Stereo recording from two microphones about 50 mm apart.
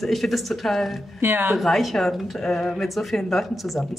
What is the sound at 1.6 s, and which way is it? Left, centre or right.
Speech, centre.